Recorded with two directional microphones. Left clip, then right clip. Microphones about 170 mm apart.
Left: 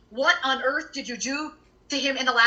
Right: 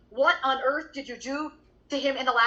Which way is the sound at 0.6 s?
30° left (ahead or behind).